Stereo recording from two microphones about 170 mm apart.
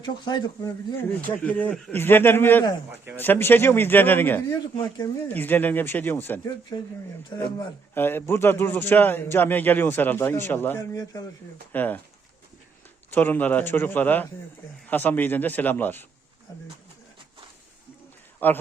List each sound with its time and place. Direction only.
0.0 s speech: 25° left (ahead or behind)
1.3 s a man's voice: 10° left (ahead or behind)
6.7 s speech: 25° left (ahead or behind)
7.9 s a man's voice: 15° left (ahead or behind)
11.7 s a man's voice: 10° left (ahead or behind)
13.1 s a man's voice: 10° left (ahead or behind)
18.4 s a man's voice: 10° left (ahead or behind)